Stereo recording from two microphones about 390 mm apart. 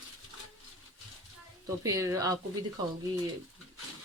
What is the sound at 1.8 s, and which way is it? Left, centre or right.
Speech, centre.